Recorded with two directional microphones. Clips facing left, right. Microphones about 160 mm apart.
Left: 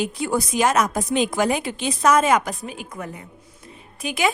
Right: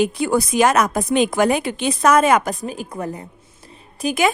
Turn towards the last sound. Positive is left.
turn(degrees=-40)  # may be behind; listen again after turning